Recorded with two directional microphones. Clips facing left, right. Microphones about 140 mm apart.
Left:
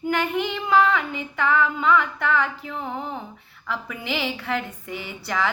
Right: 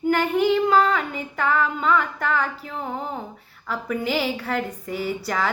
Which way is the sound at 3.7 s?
40° right (ahead or behind).